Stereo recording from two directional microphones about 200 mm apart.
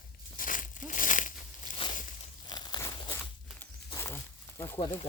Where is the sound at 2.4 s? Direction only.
20° left (ahead or behind).